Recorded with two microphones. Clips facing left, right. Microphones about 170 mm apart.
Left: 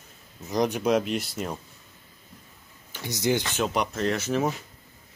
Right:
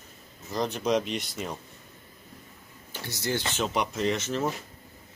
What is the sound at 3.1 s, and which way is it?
Speech, 15° left (ahead or behind).